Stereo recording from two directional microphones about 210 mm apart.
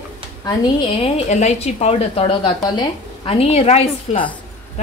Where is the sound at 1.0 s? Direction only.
30° left (ahead or behind).